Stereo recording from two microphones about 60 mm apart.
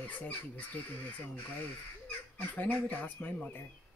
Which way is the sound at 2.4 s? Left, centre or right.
Left.